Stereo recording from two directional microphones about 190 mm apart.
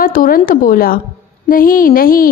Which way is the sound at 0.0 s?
50° left (ahead or behind).